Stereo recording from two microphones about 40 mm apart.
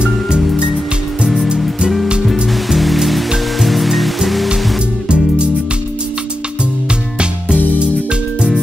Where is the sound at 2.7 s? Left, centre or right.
Centre.